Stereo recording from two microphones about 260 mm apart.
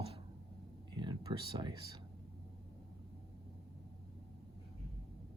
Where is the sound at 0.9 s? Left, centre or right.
Centre.